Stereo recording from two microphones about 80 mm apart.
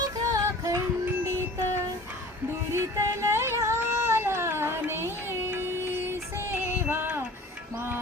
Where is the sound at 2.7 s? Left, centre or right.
Right.